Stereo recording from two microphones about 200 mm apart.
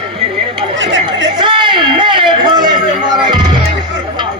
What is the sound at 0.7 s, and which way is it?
Chatter, 65° right (ahead or behind).